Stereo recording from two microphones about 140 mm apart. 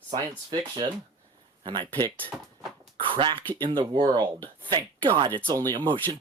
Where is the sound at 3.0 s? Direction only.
35° right (ahead or behind).